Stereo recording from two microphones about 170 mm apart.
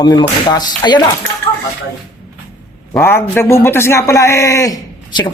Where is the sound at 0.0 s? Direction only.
25° left (ahead or behind).